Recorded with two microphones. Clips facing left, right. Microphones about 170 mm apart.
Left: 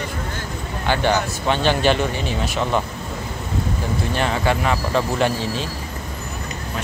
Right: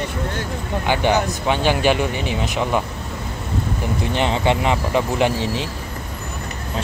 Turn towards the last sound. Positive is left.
turn(degrees=-20)  # may be behind; listen again after turning